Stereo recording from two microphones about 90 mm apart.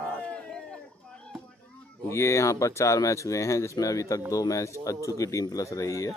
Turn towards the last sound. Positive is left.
turn(degrees=35)  # may be behind; listen again after turning